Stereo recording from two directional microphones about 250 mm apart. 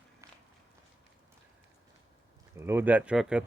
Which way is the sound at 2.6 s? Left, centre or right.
Centre.